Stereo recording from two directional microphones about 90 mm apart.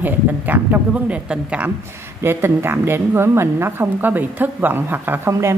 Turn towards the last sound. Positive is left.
turn(degrees=-25)  # may be behind; listen again after turning